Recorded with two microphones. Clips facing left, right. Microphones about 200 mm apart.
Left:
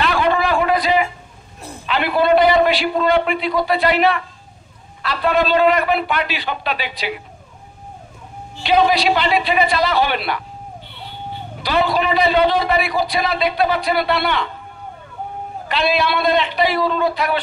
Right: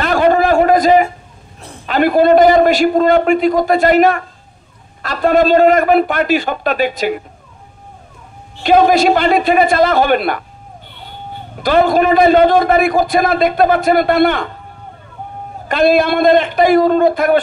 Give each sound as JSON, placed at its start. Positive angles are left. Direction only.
{"t": 0.0, "sound": "a sound", "side_deg": -45}
{"t": 1.9, "sound": "a man's voice", "side_deg": -45}
{"t": 8.6, "sound": "a man's voice", "side_deg": -50}
{"t": 11.6, "sound": "a man's voice", "side_deg": -50}
{"t": 15.7, "sound": "a man's voice", "side_deg": -50}